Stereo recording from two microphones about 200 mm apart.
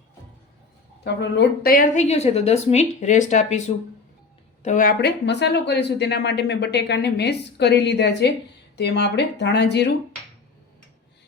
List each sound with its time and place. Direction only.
1.0 s speech: 60° left (ahead or behind)
2.0 s speech: 30° left (ahead or behind)
4.6 s speech: 40° left (ahead or behind); by 9.9 s 60° left (ahead or behind)